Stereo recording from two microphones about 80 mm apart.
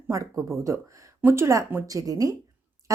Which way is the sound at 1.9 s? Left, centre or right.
Right.